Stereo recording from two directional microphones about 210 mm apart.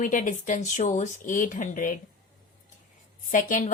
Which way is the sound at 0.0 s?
40° left (ahead or behind).